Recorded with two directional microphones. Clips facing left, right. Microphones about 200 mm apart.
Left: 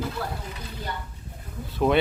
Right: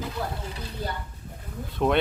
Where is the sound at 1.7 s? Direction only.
Centre (ahead or behind).